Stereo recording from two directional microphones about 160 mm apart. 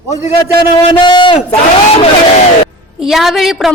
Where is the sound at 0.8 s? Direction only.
30° left (ahead or behind).